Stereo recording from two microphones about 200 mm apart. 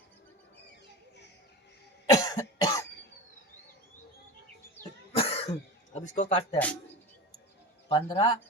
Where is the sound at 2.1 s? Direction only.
20° left (ahead or behind).